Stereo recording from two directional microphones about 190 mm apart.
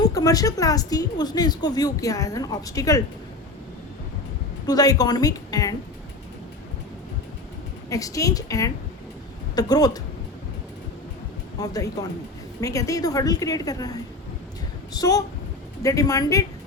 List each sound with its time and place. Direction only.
0.0 s a woman's voice: 20° left (ahead or behind)
4.6 s a woman's voice: 20° left (ahead or behind)
7.9 s a woman's voice: 20° left (ahead or behind)
11.6 s a woman's voice: 20° left (ahead or behind)